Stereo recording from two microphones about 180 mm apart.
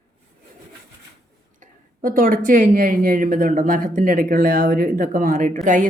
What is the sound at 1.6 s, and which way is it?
Speech, 50° right (ahead or behind).